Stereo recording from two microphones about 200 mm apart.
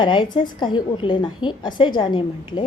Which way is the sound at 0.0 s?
25° left (ahead or behind).